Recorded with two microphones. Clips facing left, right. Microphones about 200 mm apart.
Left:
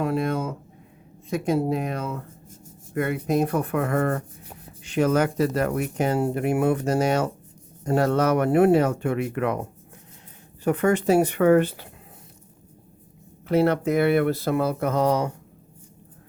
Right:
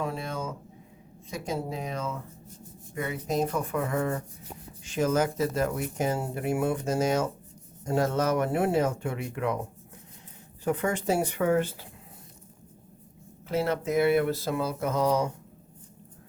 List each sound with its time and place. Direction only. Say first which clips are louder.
0.0 s a sound: left 8 dB; 65° left (ahead or behind)
1.3 s speech: left 9 dB; 60° left (ahead or behind)
10.6 s speech: left 7 dB; 65° left (ahead or behind)
13.5 s speech: left 7 dB; 60° left (ahead or behind)